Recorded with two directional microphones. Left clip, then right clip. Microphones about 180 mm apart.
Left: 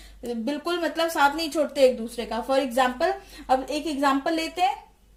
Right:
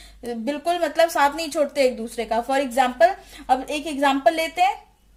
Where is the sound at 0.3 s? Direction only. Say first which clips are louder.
Right 4 dB; 40° right (ahead or behind).